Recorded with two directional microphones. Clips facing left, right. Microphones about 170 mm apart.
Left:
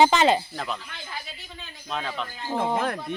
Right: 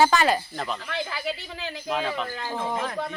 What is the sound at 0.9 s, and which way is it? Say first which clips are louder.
Speech: right 9 dB; 80° right.